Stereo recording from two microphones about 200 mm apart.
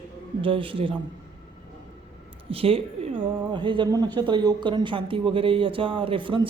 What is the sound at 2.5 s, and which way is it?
A woman's voice, 30° right (ahead or behind).